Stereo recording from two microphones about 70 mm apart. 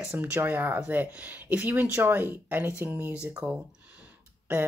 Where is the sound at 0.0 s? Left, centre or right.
Right.